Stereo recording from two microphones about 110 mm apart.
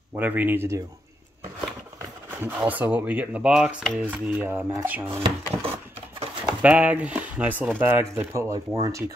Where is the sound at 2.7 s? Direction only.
15° right (ahead or behind).